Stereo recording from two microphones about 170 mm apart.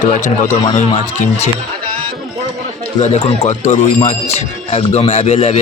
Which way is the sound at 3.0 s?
40° left (ahead or behind).